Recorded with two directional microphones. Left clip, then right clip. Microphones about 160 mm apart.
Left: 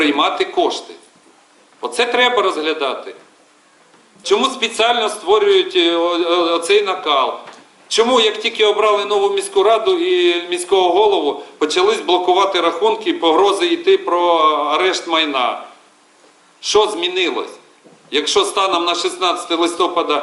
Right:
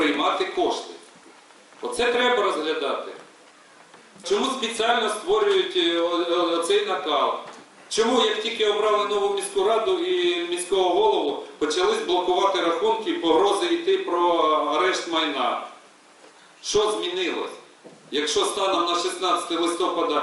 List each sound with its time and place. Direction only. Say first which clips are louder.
0.0 s speech: left 7 dB; 5° left (ahead or behind)
1.8 s speech: left 7 dB; 10° left (ahead or behind)
4.2 s speech: left 8 dB; 10° left (ahead or behind)
16.6 s speech: left 8 dB; 5° left (ahead or behind)